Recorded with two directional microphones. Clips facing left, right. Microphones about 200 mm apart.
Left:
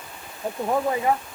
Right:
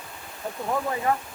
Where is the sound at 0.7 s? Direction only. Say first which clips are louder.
Left 3 dB; 20° left (ahead or behind).